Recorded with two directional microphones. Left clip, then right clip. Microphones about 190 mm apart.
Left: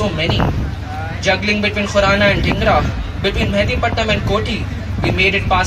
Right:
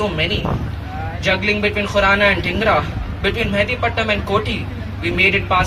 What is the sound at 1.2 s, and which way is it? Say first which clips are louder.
Speech: left 1 dB; 15° left (ahead or behind).